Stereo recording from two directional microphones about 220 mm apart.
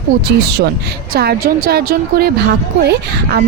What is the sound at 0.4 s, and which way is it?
Speech, 50° right (ahead or behind).